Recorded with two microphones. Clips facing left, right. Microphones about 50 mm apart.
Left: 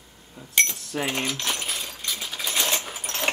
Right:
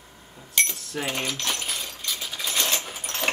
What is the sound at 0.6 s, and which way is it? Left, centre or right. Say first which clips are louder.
Keys jangling: left 2 dB; centre.